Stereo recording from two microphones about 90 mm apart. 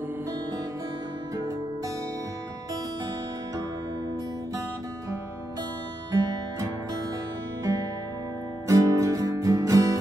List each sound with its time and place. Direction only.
7.6 s music: 35° right (ahead or behind)